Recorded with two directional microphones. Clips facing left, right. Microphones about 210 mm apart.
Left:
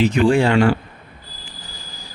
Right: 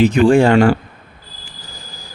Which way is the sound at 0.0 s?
50° right (ahead or behind).